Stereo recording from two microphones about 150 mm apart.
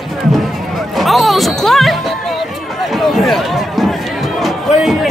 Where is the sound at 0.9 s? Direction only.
Centre (ahead or behind).